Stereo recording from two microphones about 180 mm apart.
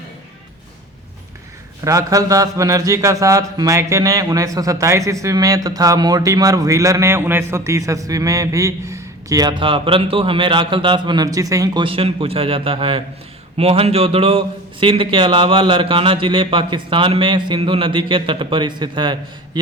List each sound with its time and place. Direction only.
1.8 s speech: 20° right (ahead or behind)